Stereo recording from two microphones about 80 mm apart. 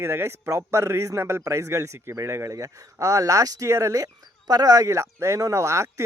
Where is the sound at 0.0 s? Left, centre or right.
Right.